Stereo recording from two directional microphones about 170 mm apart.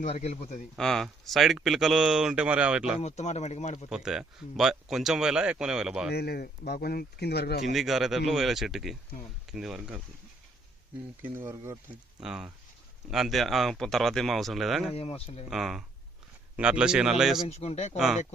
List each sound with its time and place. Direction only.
0.0 s speech: 40° left (ahead or behind)
0.8 s speech: centre (ahead or behind)
3.0 s speech: 40° left (ahead or behind)
3.8 s speech: 5° right (ahead or behind)
6.1 s speech: 70° left (ahead or behind)
7.6 s speech: centre (ahead or behind)
11.2 s speech: 15° right (ahead or behind)
12.2 s speech: 5° right (ahead or behind)
14.9 s speech: 35° left (ahead or behind)
15.4 s speech: centre (ahead or behind)
17.5 s speech: 40° left (ahead or behind)
17.9 s speech: 5° right (ahead or behind)